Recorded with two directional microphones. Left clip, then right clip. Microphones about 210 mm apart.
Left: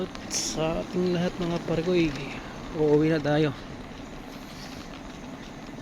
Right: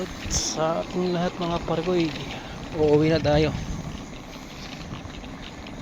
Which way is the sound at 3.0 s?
5° left (ahead or behind).